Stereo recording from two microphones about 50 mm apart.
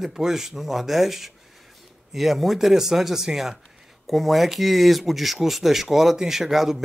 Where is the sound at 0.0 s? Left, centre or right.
Centre.